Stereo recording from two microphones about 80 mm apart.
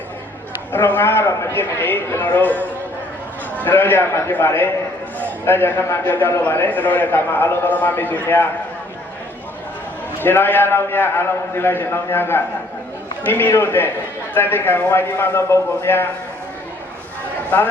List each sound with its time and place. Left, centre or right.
0.7 s a man's voice: left
10.2 s a man's voice: left
17.5 s a man's voice: left